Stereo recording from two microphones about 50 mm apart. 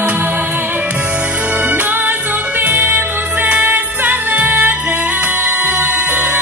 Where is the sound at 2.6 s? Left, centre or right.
Right.